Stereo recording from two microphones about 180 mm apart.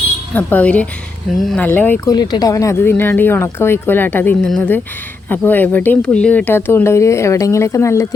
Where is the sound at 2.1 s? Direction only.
20° left (ahead or behind).